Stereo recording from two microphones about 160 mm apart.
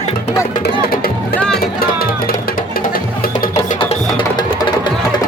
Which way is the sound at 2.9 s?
65° left (ahead or behind).